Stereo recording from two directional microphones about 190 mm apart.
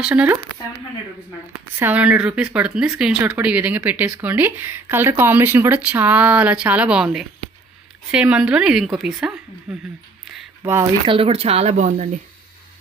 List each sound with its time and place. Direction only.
0.0 s speech: 5° right (ahead or behind)
1.8 s a woman's voice: 10° right (ahead or behind)
11.1 s speech: 30° right (ahead or behind)